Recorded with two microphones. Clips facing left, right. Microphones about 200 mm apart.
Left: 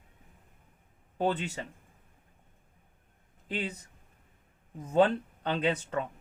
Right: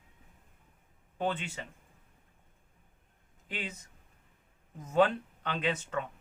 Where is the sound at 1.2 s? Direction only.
35° left (ahead or behind).